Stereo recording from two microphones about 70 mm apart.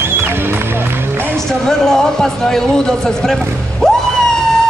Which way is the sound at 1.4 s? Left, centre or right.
Centre.